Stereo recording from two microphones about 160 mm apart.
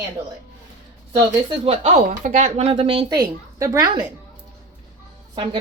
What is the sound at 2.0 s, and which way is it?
Speech, 50° right (ahead or behind).